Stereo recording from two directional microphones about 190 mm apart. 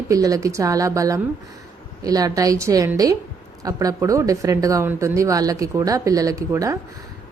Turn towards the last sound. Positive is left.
turn(degrees=-15)  # may be behind; listen again after turning